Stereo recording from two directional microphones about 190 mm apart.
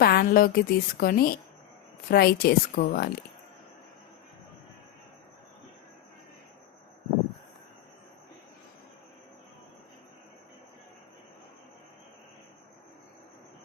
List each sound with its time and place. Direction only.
0.0 s a woman's voice: 55° left (ahead or behind)